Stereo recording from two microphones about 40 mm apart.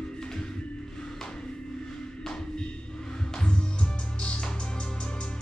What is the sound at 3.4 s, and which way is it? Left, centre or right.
Music, left.